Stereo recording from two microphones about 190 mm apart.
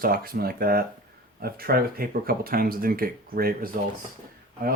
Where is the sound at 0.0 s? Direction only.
50° right (ahead or behind).